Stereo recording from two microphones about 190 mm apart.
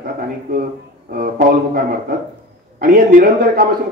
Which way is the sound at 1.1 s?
50° right (ahead or behind).